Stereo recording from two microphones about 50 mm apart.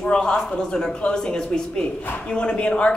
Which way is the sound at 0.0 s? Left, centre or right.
Centre.